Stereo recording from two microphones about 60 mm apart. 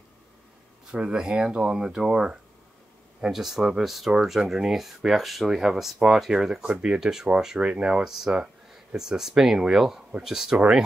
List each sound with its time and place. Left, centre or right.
0.9 s speech: centre